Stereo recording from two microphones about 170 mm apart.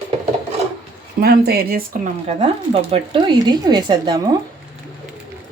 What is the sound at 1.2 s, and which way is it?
Speech, 65° right (ahead or behind).